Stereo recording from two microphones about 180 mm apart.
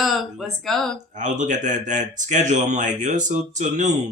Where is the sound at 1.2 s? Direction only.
45° right (ahead or behind).